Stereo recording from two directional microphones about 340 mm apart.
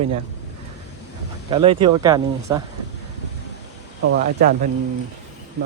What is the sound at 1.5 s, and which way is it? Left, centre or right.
Speech, centre.